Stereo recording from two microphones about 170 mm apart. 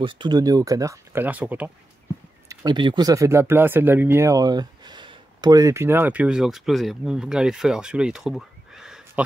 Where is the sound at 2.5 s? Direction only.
25° right (ahead or behind).